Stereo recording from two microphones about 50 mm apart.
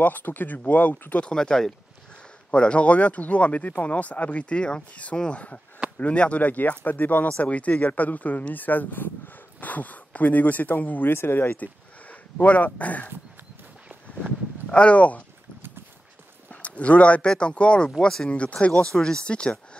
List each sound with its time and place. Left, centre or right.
0.0 s speech: left
1.2 s speech: centre; by 11.5 s left
11.5 s speech: left
14.7 s speech: left
16.4 s a sound: left
17.3 s speech: centre
18.3 s speech: left